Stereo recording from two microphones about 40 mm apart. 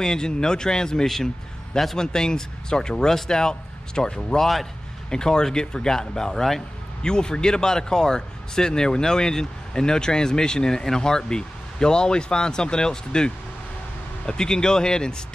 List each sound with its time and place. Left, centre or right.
0.0 s speech: centre